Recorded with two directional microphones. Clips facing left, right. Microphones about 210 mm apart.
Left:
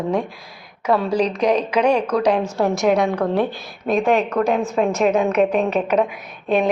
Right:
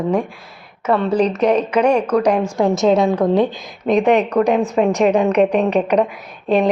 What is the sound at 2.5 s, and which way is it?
A woman's voice, 20° right (ahead or behind).